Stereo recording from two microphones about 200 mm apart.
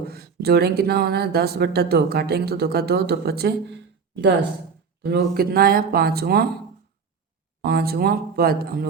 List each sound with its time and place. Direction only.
0.0 s speech: 50° right (ahead or behind)
7.6 s speech: 50° right (ahead or behind)